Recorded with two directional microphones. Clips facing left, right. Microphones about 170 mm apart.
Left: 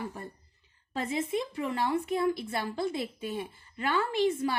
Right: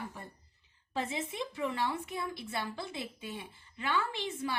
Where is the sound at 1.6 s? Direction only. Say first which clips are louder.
Left 4 dB; 45° left (ahead or behind).